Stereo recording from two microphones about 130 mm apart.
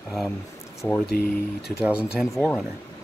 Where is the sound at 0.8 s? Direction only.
10° left (ahead or behind).